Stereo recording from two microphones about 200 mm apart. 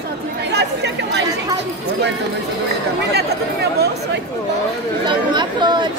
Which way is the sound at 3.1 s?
55° right (ahead or behind).